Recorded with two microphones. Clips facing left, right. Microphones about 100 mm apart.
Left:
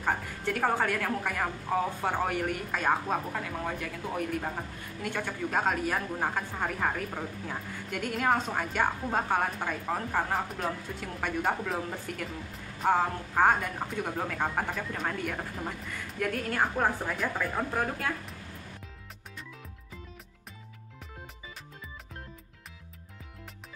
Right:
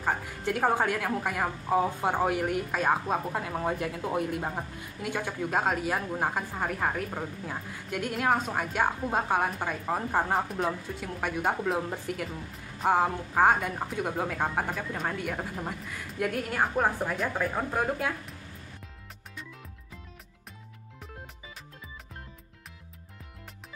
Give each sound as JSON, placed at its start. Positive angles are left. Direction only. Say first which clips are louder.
{"t": 0.0, "sound": "speech", "louder": "right 1 dB", "side_deg": -10}
{"t": 3.3, "sound": "speech", "louder": "right 4 dB", "side_deg": -25}
{"t": 5.0, "sound": "speech", "louder": "right 1 dB", "side_deg": -10}
{"t": 12.8, "sound": "speech", "louder": "right 1 dB", "side_deg": -10}